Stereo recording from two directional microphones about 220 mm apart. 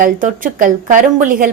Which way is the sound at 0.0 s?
40° right (ahead or behind).